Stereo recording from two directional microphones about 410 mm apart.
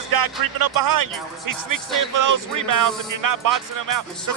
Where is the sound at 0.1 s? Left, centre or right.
Right.